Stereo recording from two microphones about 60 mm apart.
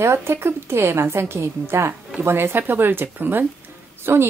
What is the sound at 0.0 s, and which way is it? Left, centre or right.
A woman's voice, right.